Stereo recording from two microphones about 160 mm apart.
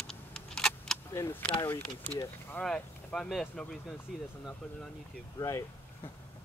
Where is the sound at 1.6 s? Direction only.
15° left (ahead or behind).